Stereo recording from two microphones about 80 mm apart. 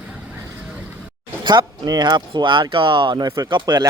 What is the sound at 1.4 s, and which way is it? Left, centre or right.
Speech, right.